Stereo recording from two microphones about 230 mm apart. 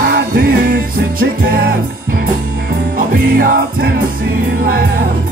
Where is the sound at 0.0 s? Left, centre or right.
Right.